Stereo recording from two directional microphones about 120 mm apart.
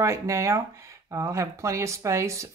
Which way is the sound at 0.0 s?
25° right (ahead or behind).